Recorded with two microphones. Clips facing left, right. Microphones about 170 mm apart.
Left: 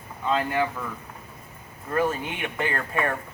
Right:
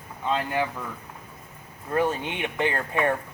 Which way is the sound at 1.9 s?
20° right (ahead or behind).